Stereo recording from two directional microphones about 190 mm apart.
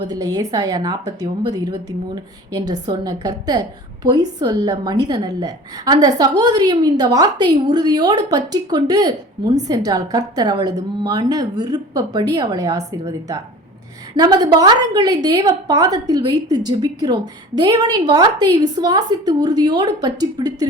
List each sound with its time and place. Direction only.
0.0 s a woman's voice: 20° right (ahead or behind)